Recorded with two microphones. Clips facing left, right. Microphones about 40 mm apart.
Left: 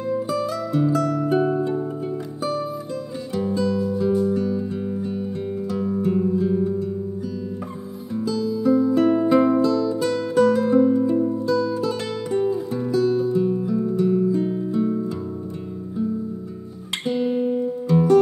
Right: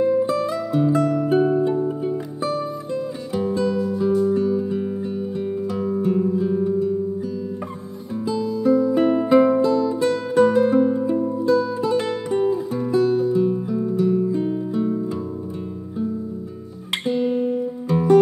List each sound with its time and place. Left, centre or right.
0.0 s music: centre
5.4 s guitar: centre
6.6 s music: centre
8.2 s music: centre
8.5 s music: centre
8.9 s music: centre
17.0 s music: centre
17.8 s music: centre